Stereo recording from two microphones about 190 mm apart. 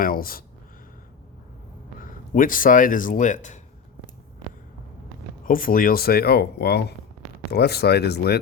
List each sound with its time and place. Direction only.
0.0 s speech: 50° left (ahead or behind)
2.3 s speech: 45° left (ahead or behind)
5.5 s speech: 50° left (ahead or behind)